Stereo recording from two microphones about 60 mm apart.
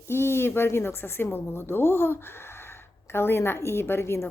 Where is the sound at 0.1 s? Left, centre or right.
Left.